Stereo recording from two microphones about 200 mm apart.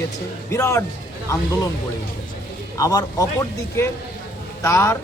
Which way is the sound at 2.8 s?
20° left (ahead or behind).